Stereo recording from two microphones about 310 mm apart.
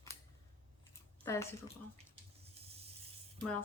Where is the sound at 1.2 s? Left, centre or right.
Centre.